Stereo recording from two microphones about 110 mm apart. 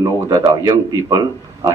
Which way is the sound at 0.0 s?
30° right (ahead or behind).